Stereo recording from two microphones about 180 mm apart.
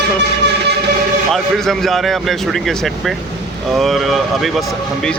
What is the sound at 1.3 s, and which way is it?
Speech, centre (ahead or behind).